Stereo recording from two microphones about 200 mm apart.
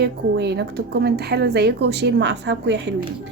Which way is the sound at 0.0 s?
55° right (ahead or behind).